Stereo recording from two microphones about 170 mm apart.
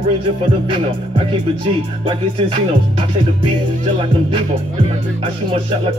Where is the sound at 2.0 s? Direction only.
30° right (ahead or behind).